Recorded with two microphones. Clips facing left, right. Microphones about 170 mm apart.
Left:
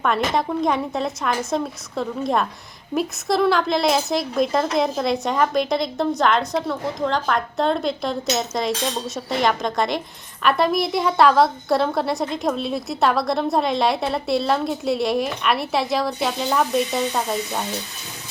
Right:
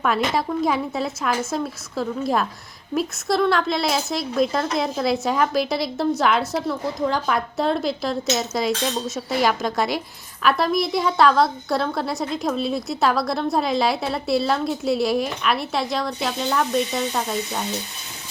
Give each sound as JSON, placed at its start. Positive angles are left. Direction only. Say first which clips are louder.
{"t": 0.0, "sound": "speech", "louder": "left 1 dB", "side_deg": -5}